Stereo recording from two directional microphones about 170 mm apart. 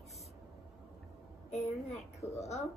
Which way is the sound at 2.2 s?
15° left (ahead or behind).